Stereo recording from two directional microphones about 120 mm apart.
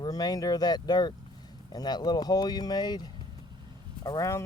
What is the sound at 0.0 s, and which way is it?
Speech, 35° left (ahead or behind).